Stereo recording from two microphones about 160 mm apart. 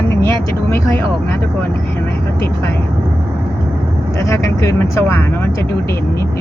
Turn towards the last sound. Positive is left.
turn(degrees=15)  # may be behind; listen again after turning